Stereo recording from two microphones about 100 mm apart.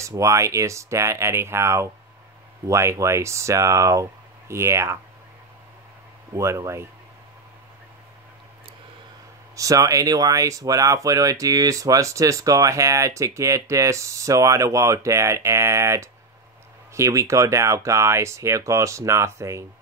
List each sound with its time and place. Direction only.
0.0 s speech: 30° right (ahead or behind)
6.3 s speech: 30° right (ahead or behind)
9.6 s speech: 35° right (ahead or behind)